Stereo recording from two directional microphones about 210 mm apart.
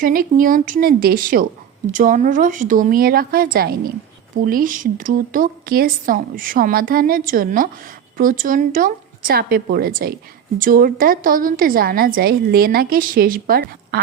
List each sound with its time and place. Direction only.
0.0 s speech: 40° right (ahead or behind)